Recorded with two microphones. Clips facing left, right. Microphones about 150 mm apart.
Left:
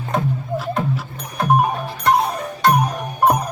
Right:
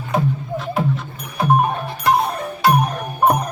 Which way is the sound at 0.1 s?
Centre (ahead or behind).